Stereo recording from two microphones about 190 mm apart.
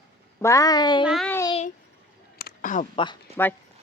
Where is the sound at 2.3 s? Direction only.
50° left (ahead or behind).